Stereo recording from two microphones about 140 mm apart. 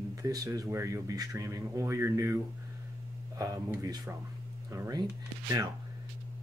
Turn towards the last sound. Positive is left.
turn(degrees=-25)  # may be behind; listen again after turning